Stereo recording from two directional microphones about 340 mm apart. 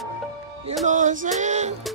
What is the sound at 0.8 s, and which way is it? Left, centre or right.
Music, right.